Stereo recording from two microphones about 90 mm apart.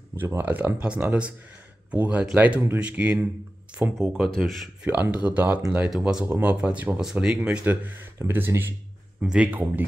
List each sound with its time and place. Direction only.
0.1 s speech: 25° right (ahead or behind)
4.0 s speech: centre (ahead or behind)
4.8 s speech: 20° right (ahead or behind)
5.9 s speech: 10° right (ahead or behind)
6.2 s speech: 25° right (ahead or behind)
6.5 s speech: 15° right (ahead or behind)
7.3 s speech: 15° right (ahead or behind)
9.2 s speech: 10° right (ahead or behind)